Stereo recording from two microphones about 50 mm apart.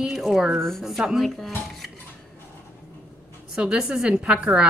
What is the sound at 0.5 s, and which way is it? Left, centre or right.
Speech, centre.